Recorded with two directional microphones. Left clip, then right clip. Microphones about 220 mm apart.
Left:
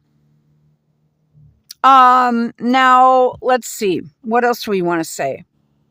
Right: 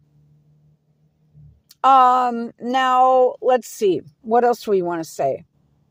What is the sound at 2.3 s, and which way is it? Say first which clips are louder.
Speech: left 7 dB; 30° left (ahead or behind).